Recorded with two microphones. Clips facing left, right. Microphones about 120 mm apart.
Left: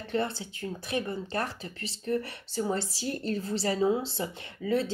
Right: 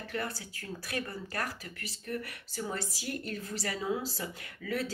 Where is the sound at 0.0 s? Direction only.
25° left (ahead or behind).